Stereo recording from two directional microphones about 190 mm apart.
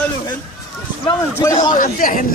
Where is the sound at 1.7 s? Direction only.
45° left (ahead or behind).